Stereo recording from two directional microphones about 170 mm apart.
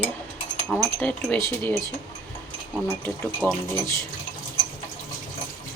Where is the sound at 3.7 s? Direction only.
20° left (ahead or behind).